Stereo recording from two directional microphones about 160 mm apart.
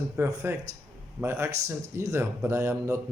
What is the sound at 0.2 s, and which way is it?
A man's voice, 15° right (ahead or behind).